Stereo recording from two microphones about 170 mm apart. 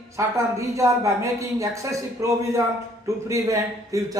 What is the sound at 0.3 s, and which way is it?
A woman's voice, 20° right (ahead or behind).